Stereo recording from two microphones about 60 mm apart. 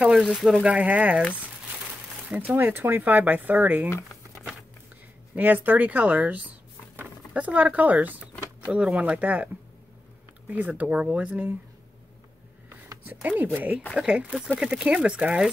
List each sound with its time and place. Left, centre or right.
0.1 s speech: centre
0.7 s speech: right
2.2 s speech: right
2.5 s speech: right
5.3 s speech: right
10.5 s speech: right
13.0 s speech: right
13.9 s speech: centre